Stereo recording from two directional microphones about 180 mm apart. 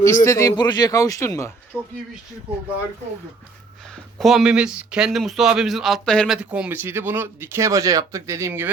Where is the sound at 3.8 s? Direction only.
Centre (ahead or behind).